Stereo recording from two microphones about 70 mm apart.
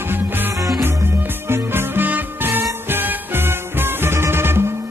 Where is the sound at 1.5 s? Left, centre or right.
Right.